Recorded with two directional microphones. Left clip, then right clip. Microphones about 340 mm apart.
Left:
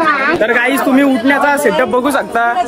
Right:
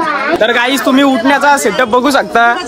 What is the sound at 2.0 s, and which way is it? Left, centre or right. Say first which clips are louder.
Speech: right 4 dB; right.